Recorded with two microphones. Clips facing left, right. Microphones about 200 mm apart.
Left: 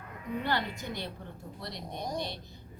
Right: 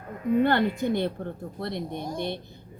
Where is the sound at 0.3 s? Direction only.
55° right (ahead or behind).